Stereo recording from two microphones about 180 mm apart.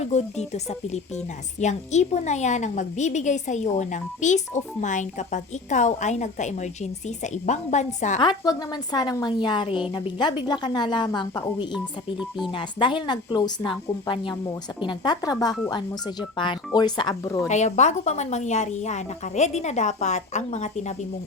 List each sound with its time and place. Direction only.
0.0 s a woman's voice: 40° left (ahead or behind)
8.2 s speech: 25° left (ahead or behind)
12.5 s speech: 25° left (ahead or behind)
17.5 s a woman's voice: 40° left (ahead or behind)